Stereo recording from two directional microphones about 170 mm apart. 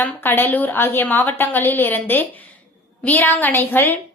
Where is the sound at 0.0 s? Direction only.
10° left (ahead or behind).